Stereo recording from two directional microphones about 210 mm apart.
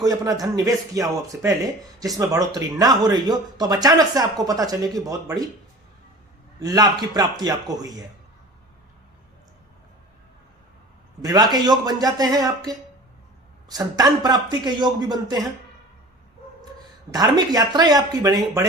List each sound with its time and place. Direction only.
0.0 s speech: 15° right (ahead or behind)
6.6 s speech: 20° right (ahead or behind)
11.2 s a man's voice: 20° right (ahead or behind)
17.1 s speech: 20° right (ahead or behind)